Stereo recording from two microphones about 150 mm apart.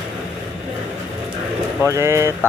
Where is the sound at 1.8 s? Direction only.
20° right (ahead or behind).